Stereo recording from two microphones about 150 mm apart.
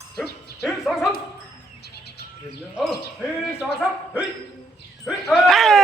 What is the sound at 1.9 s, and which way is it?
Bird, 90° left.